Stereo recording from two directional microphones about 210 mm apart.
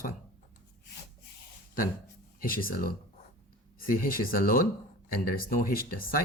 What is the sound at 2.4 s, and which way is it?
Speech, 45° left (ahead or behind).